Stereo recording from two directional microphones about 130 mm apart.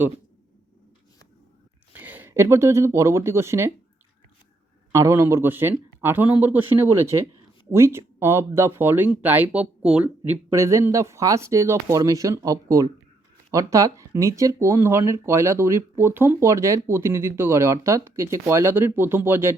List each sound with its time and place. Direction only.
1.9 s speech: 15° right (ahead or behind)
4.9 s a man's voice: 20° right (ahead or behind)